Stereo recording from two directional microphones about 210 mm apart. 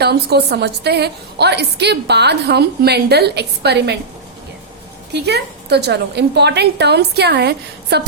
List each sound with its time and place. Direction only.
0.0 s a woman's voice: 50° right (ahead or behind)
5.1 s a woman's voice: 50° right (ahead or behind)